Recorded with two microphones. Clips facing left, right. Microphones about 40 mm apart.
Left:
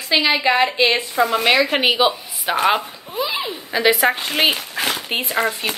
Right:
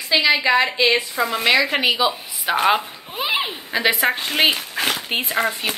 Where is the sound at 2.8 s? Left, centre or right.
Right.